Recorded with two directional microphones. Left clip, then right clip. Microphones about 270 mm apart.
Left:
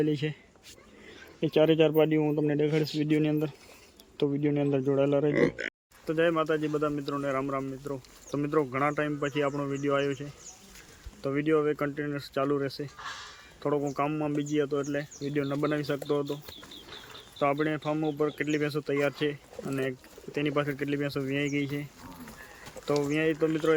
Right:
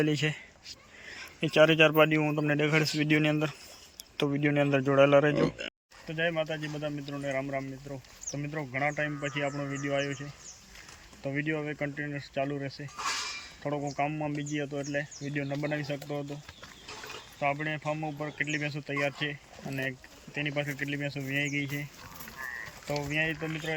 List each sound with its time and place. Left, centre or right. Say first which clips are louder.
0.0 s speech: even; centre
13.0 s dishes: right 7 dB; right
13.6 s speech: left 4 dB; centre
17.4 s speech: left 3 dB; centre
23.0 s speech: left 2 dB; centre